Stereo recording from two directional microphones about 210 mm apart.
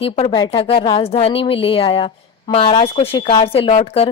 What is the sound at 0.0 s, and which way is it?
A woman's voice, 25° left (ahead or behind).